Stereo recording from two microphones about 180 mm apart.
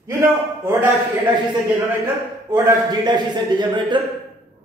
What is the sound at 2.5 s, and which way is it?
A man's voice, 20° right (ahead or behind).